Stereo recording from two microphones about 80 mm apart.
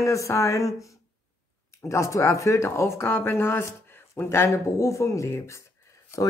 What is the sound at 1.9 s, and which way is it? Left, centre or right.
Speech, left.